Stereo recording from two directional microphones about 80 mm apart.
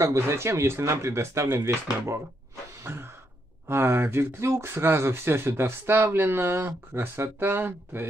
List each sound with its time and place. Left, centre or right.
0.0 s speech: right
2.8 s a sound: right
3.6 s speech: right